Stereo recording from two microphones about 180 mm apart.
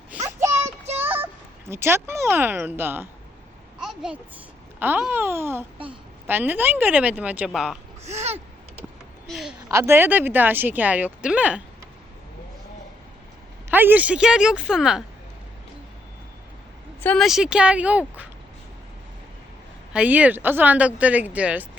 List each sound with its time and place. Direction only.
0.2 s a sound: 15° right (ahead or behind)
0.9 s speech: 10° right (ahead or behind)
3.8 s babbling: 5° right (ahead or behind)
4.8 s speech: 10° right (ahead or behind)
8.0 s a sound: 35° right (ahead or behind)
9.2 s a sound: centre (ahead or behind)
9.6 s speech: 15° right (ahead or behind)
13.7 s speech: 10° right (ahead or behind)
17.0 s speech: 5° left (ahead or behind)
19.9 s speech: 5° right (ahead or behind)